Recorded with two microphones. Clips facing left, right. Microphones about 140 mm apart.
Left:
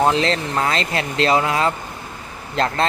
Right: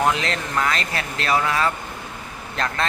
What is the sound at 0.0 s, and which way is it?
Speech, 30° left (ahead or behind).